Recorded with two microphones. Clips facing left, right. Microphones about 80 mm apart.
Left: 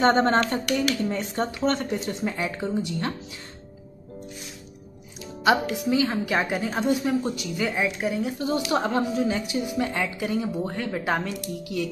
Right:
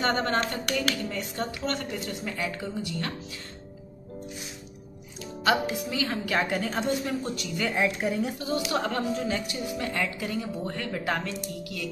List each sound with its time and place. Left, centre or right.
0.0 s a woman's voice: left
5.2 s music: centre
5.9 s a woman's voice: left; by 8.4 s centre
8.4 s a woman's voice: left
9.1 s a woman's voice: centre